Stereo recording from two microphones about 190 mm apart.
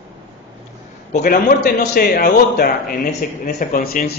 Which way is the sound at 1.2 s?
50° left (ahead or behind).